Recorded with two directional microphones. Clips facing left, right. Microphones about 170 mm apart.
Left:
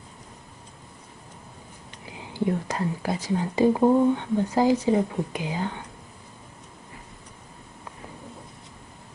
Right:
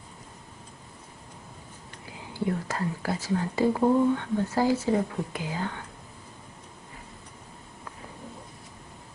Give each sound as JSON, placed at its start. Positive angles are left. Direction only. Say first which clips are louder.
{"t": 2.0, "sound": "speech", "louder": "left 3 dB", "side_deg": 20}